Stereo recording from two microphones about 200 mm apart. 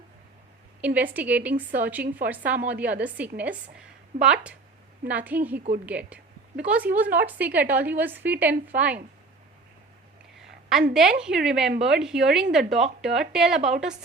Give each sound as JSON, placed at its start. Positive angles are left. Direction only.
{"t": 0.8, "sound": "a woman's voice", "side_deg": -5}
{"t": 10.3, "sound": "a sound", "side_deg": 0}
{"t": 10.9, "sound": "speech", "side_deg": -5}